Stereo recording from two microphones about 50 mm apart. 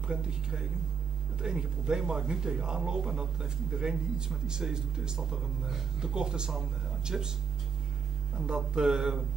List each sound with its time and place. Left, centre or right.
0.1 s a man's voice: centre
8.5 s a man's voice: centre